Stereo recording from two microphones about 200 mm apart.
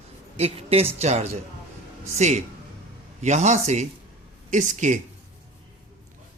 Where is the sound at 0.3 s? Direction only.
30° right (ahead or behind).